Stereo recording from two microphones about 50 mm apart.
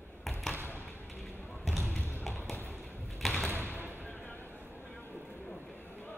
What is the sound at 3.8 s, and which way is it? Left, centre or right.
Basketball bounce, right.